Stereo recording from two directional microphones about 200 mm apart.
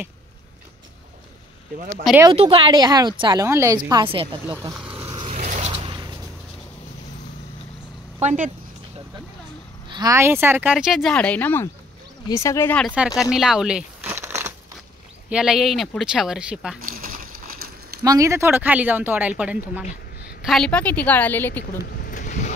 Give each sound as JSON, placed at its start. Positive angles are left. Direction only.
{"t": 2.3, "sound": "a woman's voice", "side_deg": -30}
{"t": 4.5, "sound": "speech", "side_deg": -10}
{"t": 5.0, "sound": "zipper", "side_deg": -20}
{"t": 5.3, "sound": "mechanisms", "side_deg": -35}
{"t": 8.2, "sound": "speech", "side_deg": -35}
{"t": 9.8, "sound": "a woman's voice", "side_deg": -20}
{"t": 12.8, "sound": "speech", "side_deg": -5}
{"t": 13.2, "sound": "crumpling", "side_deg": 0}
{"t": 15.2, "sound": "speech", "side_deg": -5}
{"t": 16.8, "sound": "a sound", "side_deg": -45}
{"t": 18.0, "sound": "a woman's voice", "side_deg": -15}
{"t": 21.9, "sound": "a sound", "side_deg": 45}